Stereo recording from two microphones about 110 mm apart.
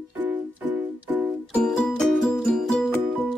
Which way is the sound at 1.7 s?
5° left (ahead or behind).